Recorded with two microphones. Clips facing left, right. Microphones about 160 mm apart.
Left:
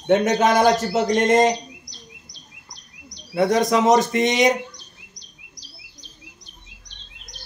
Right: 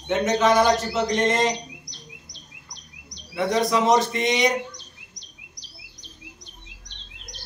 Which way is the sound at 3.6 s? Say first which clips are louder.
Left 1 dB; 45° left (ahead or behind).